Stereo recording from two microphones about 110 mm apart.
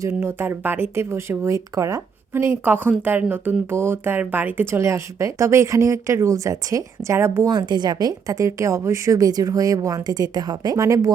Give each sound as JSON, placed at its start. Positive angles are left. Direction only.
{"t": 0.0, "sound": "speech", "side_deg": -20}
{"t": 7.5, "sound": "a woman's voice", "side_deg": -40}